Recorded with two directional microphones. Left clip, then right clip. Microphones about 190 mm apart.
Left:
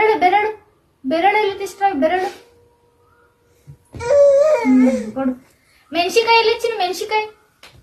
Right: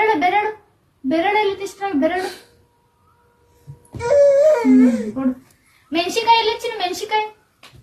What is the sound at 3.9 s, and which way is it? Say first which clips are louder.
Wail: left 1 dB; 10° left (ahead or behind).